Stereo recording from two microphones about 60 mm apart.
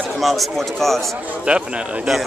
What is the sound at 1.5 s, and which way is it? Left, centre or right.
Speech, right.